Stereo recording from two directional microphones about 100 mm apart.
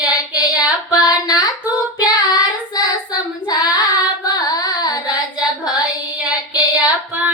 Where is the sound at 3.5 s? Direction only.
40° left (ahead or behind).